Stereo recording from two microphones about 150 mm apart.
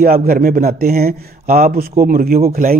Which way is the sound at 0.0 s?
70° right (ahead or behind).